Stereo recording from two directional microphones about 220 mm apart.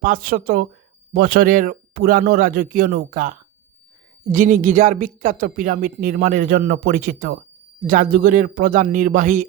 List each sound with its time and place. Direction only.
0.0 s speech: 40° right (ahead or behind)